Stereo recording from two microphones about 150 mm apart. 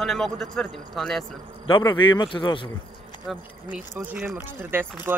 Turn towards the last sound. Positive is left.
turn(degrees=-15)  # may be behind; listen again after turning